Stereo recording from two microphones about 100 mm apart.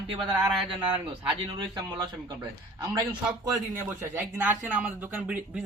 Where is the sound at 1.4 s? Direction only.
55° right (ahead or behind).